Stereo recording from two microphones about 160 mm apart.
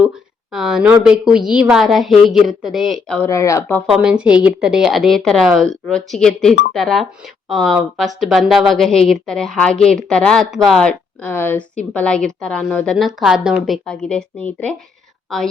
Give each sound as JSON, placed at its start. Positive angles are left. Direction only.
{"t": 0.5, "sound": "speech", "side_deg": 0}
{"t": 3.2, "sound": "speech", "side_deg": 20}
{"t": 3.9, "sound": "speech", "side_deg": -5}